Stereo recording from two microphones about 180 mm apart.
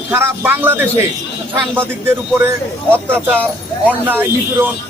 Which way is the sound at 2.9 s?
10° right (ahead or behind).